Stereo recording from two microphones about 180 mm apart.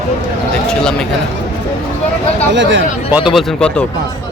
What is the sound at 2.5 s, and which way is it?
Speech, 90° right.